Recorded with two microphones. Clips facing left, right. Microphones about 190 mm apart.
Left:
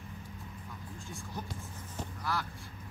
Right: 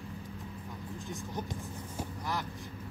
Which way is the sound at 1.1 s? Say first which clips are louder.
Right 3 dB; 20° right (ahead or behind).